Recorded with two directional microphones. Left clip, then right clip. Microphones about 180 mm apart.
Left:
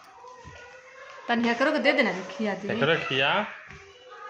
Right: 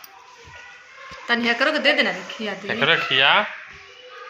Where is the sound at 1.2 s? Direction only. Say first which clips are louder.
Right 5 dB; 50° left (ahead or behind).